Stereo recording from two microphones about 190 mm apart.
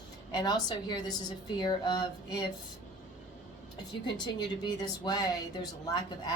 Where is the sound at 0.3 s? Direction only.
20° left (ahead or behind).